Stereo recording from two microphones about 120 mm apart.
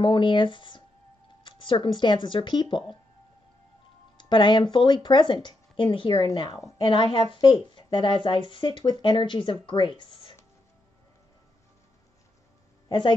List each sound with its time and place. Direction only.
0.0 s speech: 45° left (ahead or behind)
4.2 s speech: 40° left (ahead or behind)
12.8 s a sound: 40° left (ahead or behind)